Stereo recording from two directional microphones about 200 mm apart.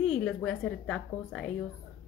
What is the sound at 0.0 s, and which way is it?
A woman's voice, 5° left (ahead or behind).